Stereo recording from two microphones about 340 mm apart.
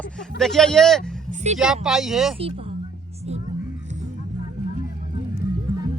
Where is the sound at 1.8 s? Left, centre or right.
Centre.